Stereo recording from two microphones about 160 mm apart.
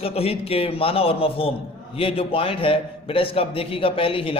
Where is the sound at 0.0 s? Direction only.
40° left (ahead or behind).